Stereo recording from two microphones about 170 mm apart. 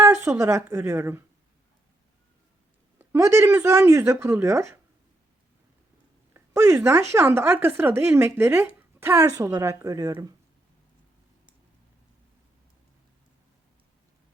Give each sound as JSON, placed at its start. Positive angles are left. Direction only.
{"t": 0.0, "sound": "speech", "side_deg": -15}
{"t": 3.0, "sound": "speech", "side_deg": -15}
{"t": 6.3, "sound": "a woman's voice", "side_deg": -15}